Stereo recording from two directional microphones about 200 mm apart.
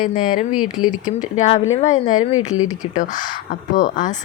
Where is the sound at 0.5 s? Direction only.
90° left.